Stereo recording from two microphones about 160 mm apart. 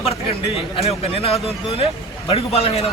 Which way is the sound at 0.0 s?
40° left (ahead or behind).